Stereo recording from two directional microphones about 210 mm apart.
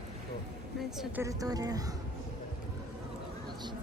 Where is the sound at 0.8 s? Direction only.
Centre (ahead or behind).